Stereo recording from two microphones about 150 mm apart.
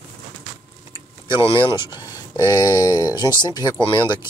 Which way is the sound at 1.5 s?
35° left (ahead or behind).